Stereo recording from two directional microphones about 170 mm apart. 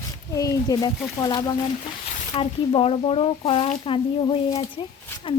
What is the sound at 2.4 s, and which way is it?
A woman's voice, 35° left (ahead or behind).